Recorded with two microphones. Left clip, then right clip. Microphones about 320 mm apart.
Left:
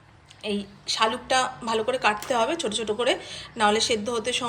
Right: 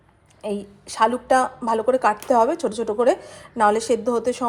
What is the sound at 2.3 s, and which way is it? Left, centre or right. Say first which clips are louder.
A woman's voice: right 6 dB; centre.